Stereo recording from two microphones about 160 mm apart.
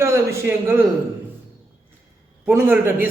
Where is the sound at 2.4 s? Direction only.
10° right (ahead or behind).